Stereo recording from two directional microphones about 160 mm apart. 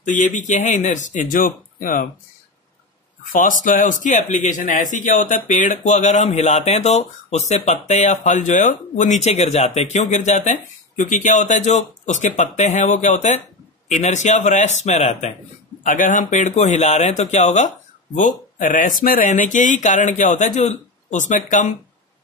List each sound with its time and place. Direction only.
0.0 s speech: 50° left (ahead or behind)
3.3 s speech: 55° left (ahead or behind)
15.8 s speech: 55° left (ahead or behind)